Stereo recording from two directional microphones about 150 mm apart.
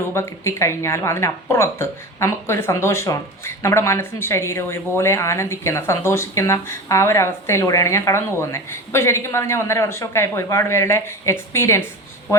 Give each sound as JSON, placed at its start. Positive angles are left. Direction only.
{"t": 0.1, "sound": "speech", "side_deg": 20}